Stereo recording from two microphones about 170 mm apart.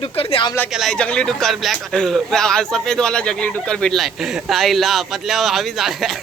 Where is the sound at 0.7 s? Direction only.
Centre (ahead or behind).